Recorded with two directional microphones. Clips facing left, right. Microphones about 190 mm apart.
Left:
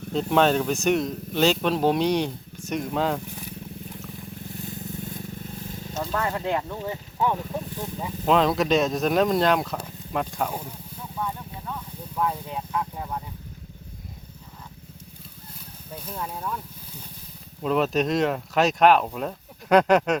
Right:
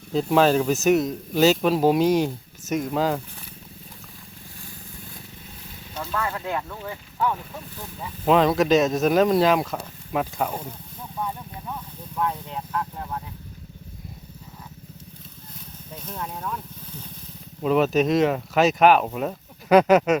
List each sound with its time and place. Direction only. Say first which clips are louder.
0.1 s speech: right 2 dB; 5° right (ahead or behind)
6.0 s speech: left 1 dB; 30° left (ahead or behind)
8.2 s speech: right 2 dB; 5° right (ahead or behind)
11.2 s a sound: right 1 dB; 10° right (ahead or behind)
12.1 s vehicle: even; 5° left (ahead or behind)
16.0 s speech: even; 5° left (ahead or behind)